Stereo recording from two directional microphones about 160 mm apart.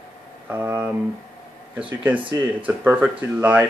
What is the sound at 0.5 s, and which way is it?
Speech, 15° right (ahead or behind).